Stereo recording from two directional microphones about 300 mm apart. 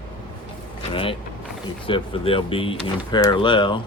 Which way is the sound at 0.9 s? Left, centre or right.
Centre.